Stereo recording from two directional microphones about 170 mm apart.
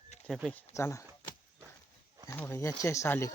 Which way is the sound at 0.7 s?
15° left (ahead or behind).